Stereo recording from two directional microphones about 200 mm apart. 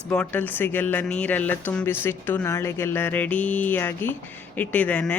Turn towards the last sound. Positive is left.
turn(degrees=5)  # may be behind; listen again after turning